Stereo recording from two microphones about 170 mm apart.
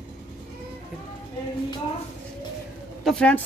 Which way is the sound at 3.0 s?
5° left (ahead or behind).